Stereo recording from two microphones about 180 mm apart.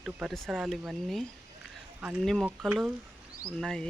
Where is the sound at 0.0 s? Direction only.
Centre (ahead or behind).